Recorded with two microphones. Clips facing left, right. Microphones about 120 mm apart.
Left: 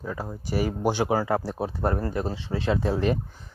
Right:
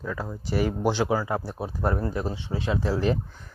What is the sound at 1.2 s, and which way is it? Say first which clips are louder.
Speech: left 3 dB; 80° left.